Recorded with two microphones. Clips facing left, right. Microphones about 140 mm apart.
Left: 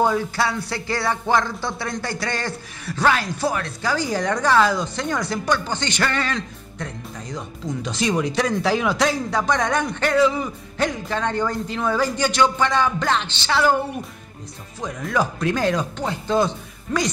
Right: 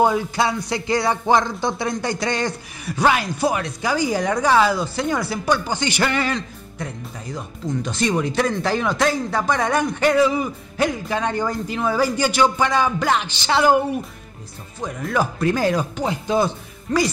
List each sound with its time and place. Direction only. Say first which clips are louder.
0.0 s speech: right 2 dB; 15° right (ahead or behind)
14.8 s speech: right 1 dB; centre (ahead or behind)